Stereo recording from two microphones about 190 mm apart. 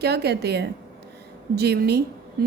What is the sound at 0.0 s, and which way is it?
A woman's voice, 60° right (ahead or behind).